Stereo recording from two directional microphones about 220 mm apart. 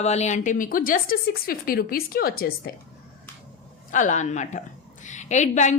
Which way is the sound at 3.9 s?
35° left (ahead or behind).